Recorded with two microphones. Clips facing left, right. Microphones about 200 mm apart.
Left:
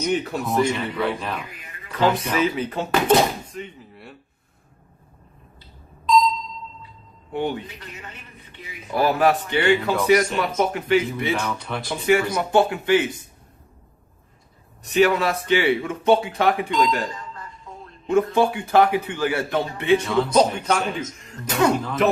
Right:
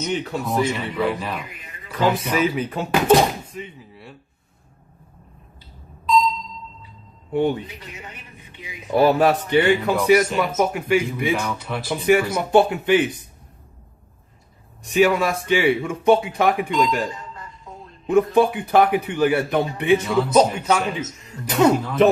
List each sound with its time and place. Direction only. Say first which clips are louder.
0.0 s a man's voice: left 1 dB; centre (ahead or behind)
7.8 s speech: right 1 dB; 15° right (ahead or behind)
10.0 s speech: right 2 dB; 5° right (ahead or behind)
12.4 s a man's voice: right 2 dB; 20° right (ahead or behind)
14.8 s speech: right 1 dB; 10° right (ahead or behind)
18.1 s a man's voice: right 2 dB; 15° right (ahead or behind)
20.0 s a man's voice: right 2 dB; 5° right (ahead or behind)
21.5 s a man's voice: right 3 dB; 25° right (ahead or behind)